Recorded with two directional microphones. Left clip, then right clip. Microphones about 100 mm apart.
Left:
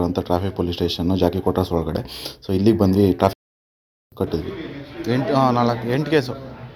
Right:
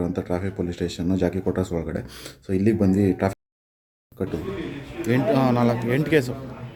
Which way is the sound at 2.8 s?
25° left (ahead or behind).